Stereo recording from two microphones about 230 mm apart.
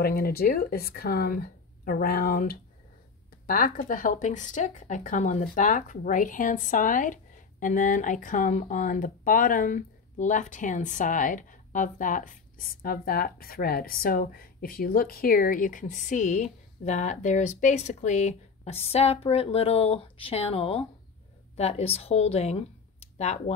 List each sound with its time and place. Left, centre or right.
0.0 s speech: left